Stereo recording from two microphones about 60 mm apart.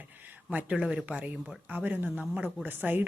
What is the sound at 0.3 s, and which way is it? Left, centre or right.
A woman's voice, right.